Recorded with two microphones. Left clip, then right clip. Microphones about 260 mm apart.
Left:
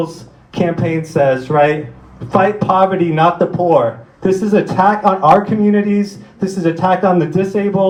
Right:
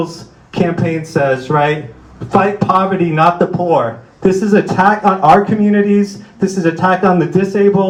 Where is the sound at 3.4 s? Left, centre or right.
Right.